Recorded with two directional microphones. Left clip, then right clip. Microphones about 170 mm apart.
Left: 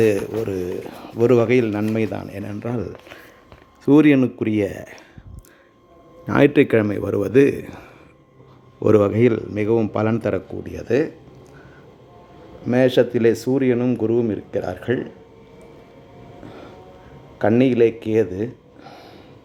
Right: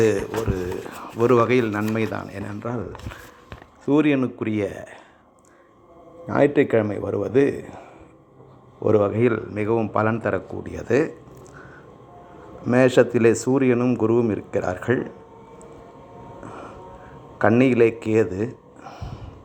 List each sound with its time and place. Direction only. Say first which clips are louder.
0.4 s speech: left 2 dB; 40° left (ahead or behind)
2.6 s speech: left 3 dB; 50° left (ahead or behind)
3.8 s speech: left 5 dB; 70° left (ahead or behind)
4.2 s speech: left 4 dB; 45° left (ahead or behind); by 4.9 s 65° left (ahead or behind)
6.2 s a man's voice: left 3 dB; 60° left (ahead or behind)
9.0 s speech: left 2 dB; 50° left (ahead or behind)
10.6 s speech: even; 25° left (ahead or behind)
12.7 s speech: even; 20° left (ahead or behind)
13.7 s speech: even; 25° left (ahead or behind)
17.6 s speech: left 3 dB; 20° left (ahead or behind)